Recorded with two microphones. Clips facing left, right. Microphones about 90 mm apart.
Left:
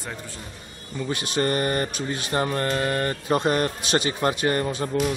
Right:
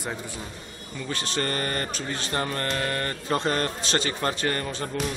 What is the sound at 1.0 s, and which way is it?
Speech, 15° left (ahead or behind).